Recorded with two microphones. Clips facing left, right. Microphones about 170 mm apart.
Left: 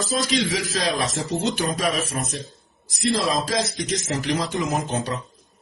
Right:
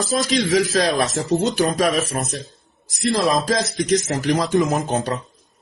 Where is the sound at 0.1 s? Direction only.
50° right (ahead or behind).